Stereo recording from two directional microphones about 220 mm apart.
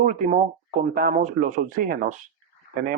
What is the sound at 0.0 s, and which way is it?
Speech, 30° right (ahead or behind).